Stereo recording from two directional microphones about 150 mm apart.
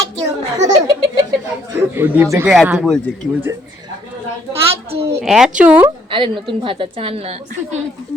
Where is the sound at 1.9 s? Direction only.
15° right (ahead or behind).